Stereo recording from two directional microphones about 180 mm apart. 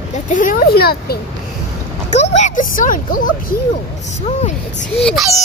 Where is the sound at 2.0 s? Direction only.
40° left (ahead or behind).